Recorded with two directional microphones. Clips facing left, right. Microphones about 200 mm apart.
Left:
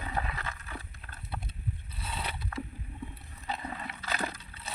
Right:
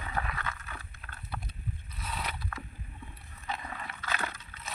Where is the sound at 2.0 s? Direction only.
30° left (ahead or behind).